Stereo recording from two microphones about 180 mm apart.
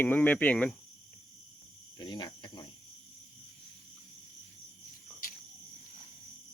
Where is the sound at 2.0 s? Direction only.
25° left (ahead or behind).